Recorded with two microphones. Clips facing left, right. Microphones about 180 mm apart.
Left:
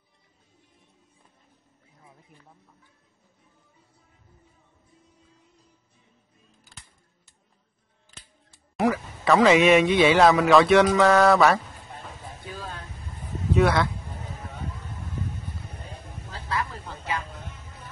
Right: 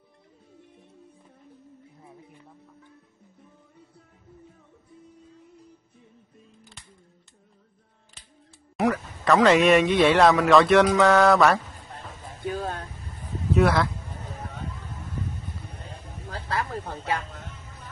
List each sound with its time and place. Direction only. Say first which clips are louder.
8.7 s speech: even; centre (ahead or behind)
12.4 s music: right 9 dB; 45° right (ahead or behind)
13.5 s speech: even; centre (ahead or behind)
16.3 s music: right 1 dB; 45° right (ahead or behind)